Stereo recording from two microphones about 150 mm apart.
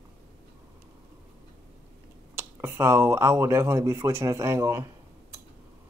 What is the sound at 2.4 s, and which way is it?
Speech, 15° right (ahead or behind).